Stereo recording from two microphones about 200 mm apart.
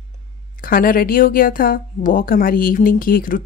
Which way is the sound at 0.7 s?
45° left (ahead or behind).